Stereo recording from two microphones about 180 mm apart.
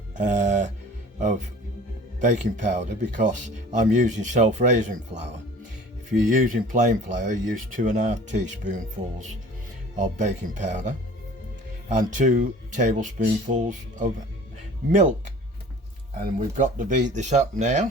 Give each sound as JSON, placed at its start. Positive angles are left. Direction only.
{"t": 0.2, "sound": "speech", "side_deg": -45}
{"t": 2.1, "sound": "speech", "side_deg": -45}
{"t": 16.2, "sound": "speech", "side_deg": -45}